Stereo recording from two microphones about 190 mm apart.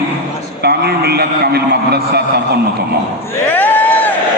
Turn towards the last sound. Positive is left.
turn(degrees=10)  # may be behind; listen again after turning